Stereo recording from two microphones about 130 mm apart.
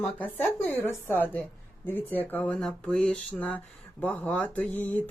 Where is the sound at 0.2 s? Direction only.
15° left (ahead or behind).